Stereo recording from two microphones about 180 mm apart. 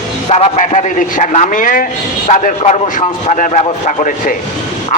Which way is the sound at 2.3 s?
40° left (ahead or behind).